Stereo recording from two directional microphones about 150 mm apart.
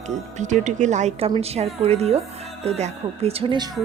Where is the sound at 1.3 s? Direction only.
40° right (ahead or behind).